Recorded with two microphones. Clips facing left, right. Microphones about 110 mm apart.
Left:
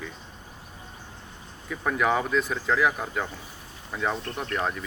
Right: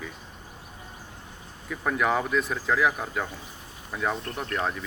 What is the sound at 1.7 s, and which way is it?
Speech, centre (ahead or behind).